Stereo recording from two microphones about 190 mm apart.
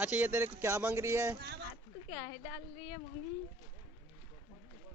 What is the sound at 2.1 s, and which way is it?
Speech, 20° left (ahead or behind).